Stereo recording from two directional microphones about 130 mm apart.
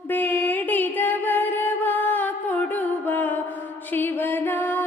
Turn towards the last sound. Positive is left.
turn(degrees=15)  # may be behind; listen again after turning